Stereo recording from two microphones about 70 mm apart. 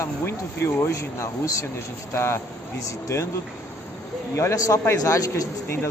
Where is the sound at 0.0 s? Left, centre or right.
Left.